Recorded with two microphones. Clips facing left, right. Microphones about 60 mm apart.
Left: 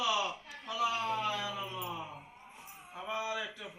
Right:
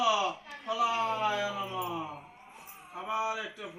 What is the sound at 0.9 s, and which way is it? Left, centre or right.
Speech, right.